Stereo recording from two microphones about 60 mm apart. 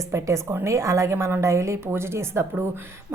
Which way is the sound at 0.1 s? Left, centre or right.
Right.